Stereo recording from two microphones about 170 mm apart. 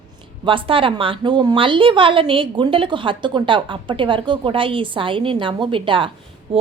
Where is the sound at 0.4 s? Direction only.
30° right (ahead or behind).